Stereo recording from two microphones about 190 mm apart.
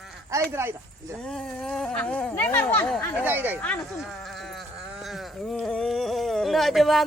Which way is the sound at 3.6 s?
5° left (ahead or behind).